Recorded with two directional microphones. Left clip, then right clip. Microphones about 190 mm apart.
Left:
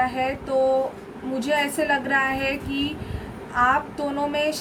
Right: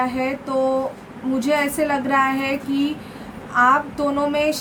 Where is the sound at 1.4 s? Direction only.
20° right (ahead or behind).